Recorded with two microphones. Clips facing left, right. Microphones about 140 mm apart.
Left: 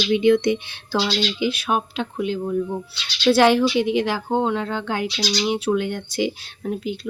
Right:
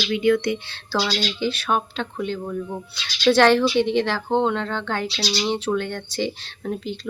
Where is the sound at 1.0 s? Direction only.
10° left (ahead or behind).